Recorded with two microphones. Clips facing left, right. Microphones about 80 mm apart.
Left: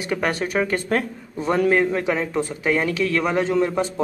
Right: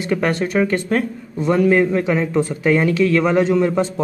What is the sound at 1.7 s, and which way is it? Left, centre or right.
Speech, centre.